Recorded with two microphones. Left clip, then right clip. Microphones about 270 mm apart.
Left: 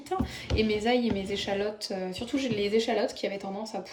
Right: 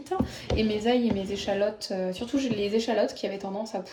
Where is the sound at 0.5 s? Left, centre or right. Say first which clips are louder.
Right 1 dB; centre.